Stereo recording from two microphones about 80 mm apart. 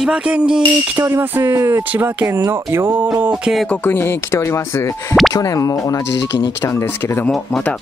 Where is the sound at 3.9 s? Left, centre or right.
Left.